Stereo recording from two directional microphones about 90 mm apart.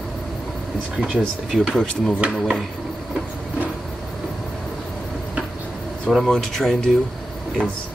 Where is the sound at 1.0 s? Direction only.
10° right (ahead or behind).